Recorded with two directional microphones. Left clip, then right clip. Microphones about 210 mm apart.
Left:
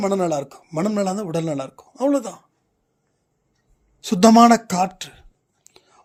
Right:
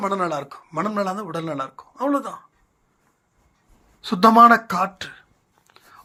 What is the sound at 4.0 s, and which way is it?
A man's voice, 60° left (ahead or behind).